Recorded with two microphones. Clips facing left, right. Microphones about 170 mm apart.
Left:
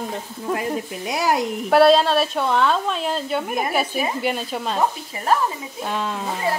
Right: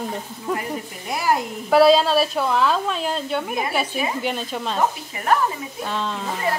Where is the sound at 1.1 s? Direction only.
90° left.